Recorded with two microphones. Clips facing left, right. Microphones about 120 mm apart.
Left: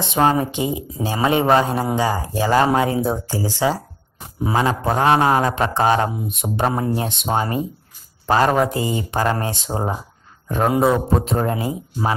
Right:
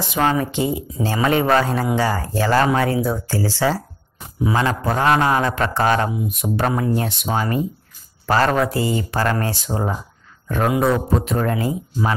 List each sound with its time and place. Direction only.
0.0 s a man's voice: 25° left (ahead or behind)
11.2 s a man's voice: 25° left (ahead or behind)